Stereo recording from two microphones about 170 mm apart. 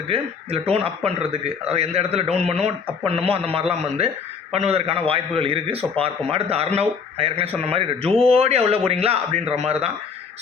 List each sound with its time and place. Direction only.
0.1 s speech: 35° right (ahead or behind)